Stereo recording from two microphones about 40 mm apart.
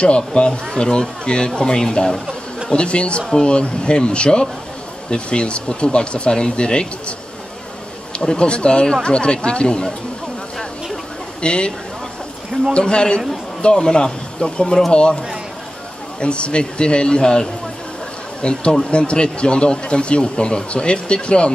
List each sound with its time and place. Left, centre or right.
0.0 s speech: left
2.7 s speech: left
11.4 s speech: left
12.7 s speech: left
16.2 s speech: left